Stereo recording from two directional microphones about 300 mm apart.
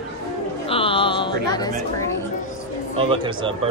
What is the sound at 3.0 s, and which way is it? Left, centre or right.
Speech, centre.